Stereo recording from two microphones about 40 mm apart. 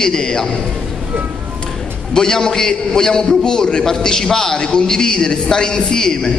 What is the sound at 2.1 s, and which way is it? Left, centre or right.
A man's voice, centre.